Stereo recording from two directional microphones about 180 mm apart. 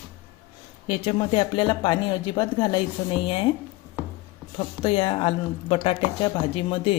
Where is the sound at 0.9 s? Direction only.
30° left (ahead or behind).